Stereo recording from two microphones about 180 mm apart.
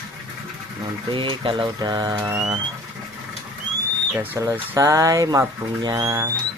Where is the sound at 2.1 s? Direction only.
10° right (ahead or behind).